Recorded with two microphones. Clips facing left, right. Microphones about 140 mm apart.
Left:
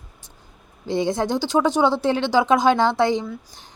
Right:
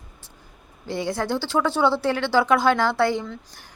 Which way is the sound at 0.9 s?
20° left (ahead or behind).